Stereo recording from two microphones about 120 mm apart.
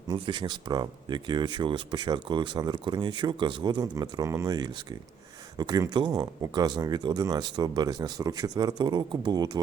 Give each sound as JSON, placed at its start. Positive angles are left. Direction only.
{"t": 0.1, "sound": "speech", "side_deg": -40}